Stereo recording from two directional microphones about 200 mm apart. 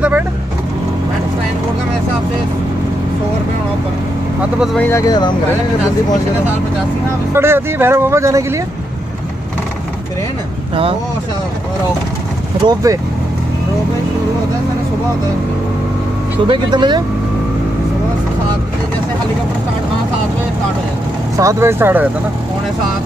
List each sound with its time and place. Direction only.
4.7 s speech: 10° left (ahead or behind)
7.3 s speech: 10° right (ahead or behind)
12.6 s speech: 15° right (ahead or behind)
16.4 s speech: 20° right (ahead or behind)
21.4 s speech: 15° right (ahead or behind)